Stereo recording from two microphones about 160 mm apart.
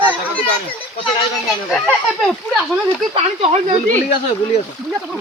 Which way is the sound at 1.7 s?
Centre (ahead or behind).